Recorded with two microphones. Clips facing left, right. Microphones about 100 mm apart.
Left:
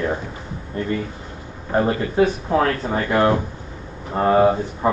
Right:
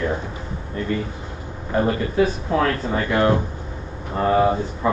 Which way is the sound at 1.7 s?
30° left (ahead or behind).